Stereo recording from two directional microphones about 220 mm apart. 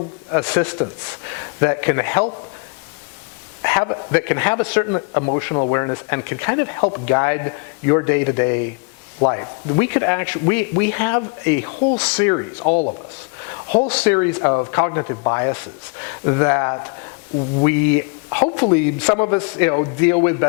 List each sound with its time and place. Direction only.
0.3 s speech: 15° left (ahead or behind)
3.6 s speech: 15° left (ahead or behind)
12.5 s speech: 35° left (ahead or behind)
13.8 s speech: 10° left (ahead or behind)
14.3 s a man's voice: 25° left (ahead or behind)